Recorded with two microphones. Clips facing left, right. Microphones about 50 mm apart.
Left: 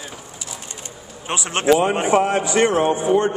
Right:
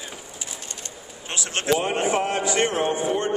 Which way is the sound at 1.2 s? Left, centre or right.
Left.